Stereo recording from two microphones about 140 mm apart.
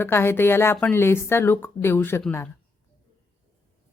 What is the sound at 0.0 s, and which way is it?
Speech, 15° left (ahead or behind).